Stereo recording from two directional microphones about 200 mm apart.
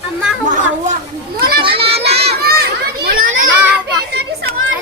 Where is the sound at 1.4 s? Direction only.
50° right (ahead or behind).